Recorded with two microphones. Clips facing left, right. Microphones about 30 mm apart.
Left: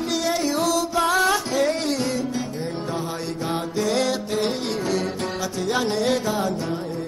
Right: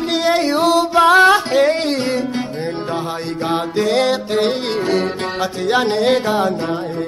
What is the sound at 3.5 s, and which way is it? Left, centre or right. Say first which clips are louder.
Music: right 7 dB; right.